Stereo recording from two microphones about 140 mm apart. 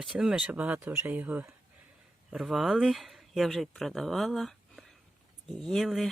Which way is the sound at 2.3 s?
Centre (ahead or behind).